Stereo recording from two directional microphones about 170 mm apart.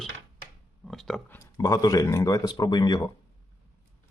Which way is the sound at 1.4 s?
20° left (ahead or behind).